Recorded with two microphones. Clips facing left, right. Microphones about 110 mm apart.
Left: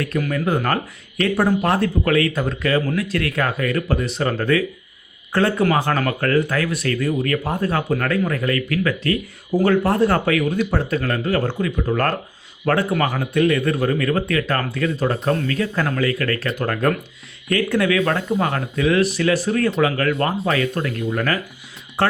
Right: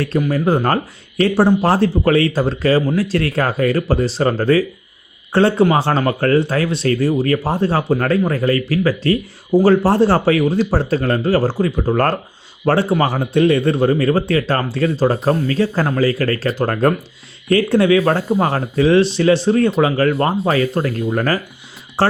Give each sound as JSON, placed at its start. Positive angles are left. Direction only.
{"t": 0.3, "sound": "speech", "side_deg": -30}